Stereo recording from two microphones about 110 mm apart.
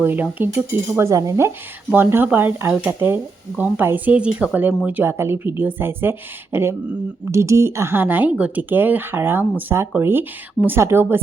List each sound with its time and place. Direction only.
0.0 s a woman's voice: 15° right (ahead or behind)